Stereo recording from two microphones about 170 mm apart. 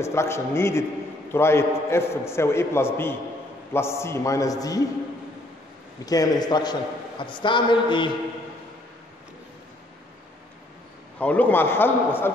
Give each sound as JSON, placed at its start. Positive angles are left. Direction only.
{"t": 0.0, "sound": "a man's voice", "side_deg": 15}
{"t": 6.0, "sound": "a man's voice", "side_deg": 20}
{"t": 11.1, "sound": "a man's voice", "side_deg": 10}